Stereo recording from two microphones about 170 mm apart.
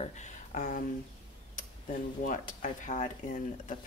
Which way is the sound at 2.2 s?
50° left (ahead or behind).